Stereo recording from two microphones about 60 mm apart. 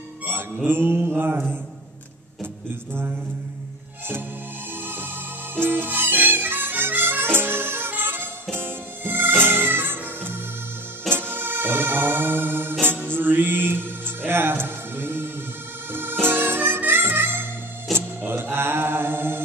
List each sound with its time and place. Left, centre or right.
0.7 s mantra: right
2.9 s mantra: right
5.6 s music: right